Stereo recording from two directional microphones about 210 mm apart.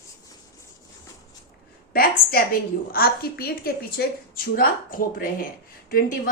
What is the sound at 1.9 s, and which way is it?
A woman's voice, 45° left (ahead or behind).